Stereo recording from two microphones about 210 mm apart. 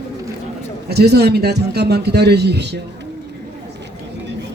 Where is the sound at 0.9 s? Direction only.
50° right (ahead or behind).